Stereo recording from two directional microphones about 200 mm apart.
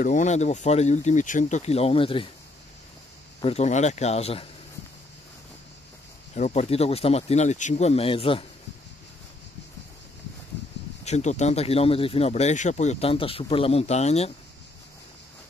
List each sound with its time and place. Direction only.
0.0 s speech: 40° left (ahead or behind)
3.3 s speech: 30° left (ahead or behind)
6.3 s speech: 35° left (ahead or behind)
11.1 s speech: 35° left (ahead or behind)